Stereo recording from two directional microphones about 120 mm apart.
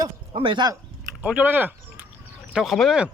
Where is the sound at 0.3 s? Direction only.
45° right (ahead or behind).